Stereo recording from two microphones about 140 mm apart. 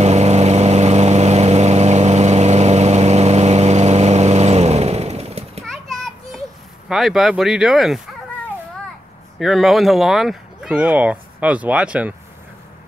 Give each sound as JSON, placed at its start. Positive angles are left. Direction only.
{"t": 0.0, "sound": "vehicle", "side_deg": -50}
{"t": 5.6, "sound": "children playing", "side_deg": 0}
{"t": 6.9, "sound": "speech", "side_deg": 0}
{"t": 9.4, "sound": "speech", "side_deg": 0}